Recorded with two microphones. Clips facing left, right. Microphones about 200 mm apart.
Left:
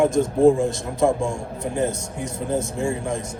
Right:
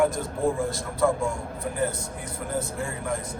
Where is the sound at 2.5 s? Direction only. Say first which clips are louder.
Left 7 dB; 30° left (ahead or behind).